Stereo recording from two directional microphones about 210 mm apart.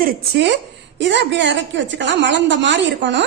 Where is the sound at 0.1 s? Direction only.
55° right (ahead or behind).